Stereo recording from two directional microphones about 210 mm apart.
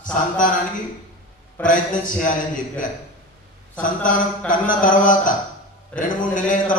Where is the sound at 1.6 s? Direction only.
40° left (ahead or behind).